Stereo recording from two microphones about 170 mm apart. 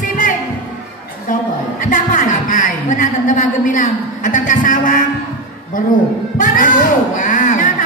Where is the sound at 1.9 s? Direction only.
50° left (ahead or behind).